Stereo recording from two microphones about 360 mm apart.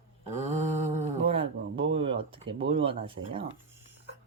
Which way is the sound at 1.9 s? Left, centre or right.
Centre.